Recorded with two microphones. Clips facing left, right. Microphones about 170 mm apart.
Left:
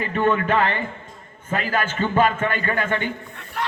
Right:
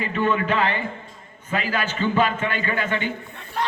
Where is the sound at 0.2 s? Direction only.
50° left (ahead or behind).